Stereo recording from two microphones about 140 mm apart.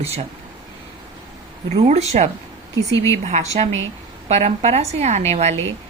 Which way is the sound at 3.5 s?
50° right (ahead or behind).